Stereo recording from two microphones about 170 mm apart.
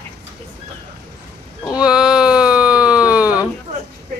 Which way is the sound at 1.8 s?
5° right (ahead or behind).